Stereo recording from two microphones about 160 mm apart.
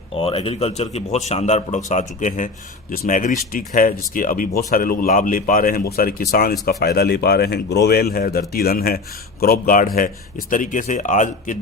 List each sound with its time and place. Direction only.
0.1 s speech: 35° left (ahead or behind)
2.9 s speech: 60° left (ahead or behind)